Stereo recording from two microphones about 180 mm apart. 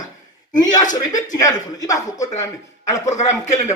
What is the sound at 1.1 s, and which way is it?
Speech, 20° left (ahead or behind).